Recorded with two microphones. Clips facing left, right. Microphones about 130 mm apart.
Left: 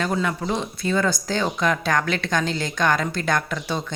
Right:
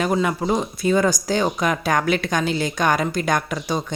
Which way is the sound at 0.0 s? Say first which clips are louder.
Right 3 dB; 15° right (ahead or behind).